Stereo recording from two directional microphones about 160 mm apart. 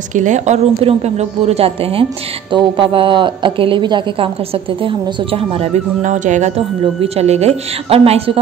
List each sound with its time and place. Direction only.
0.1 s a woman's voice: 50° right (ahead or behind)